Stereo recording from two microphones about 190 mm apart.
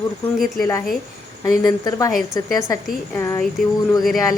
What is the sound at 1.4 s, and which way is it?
Speech, 20° left (ahead or behind).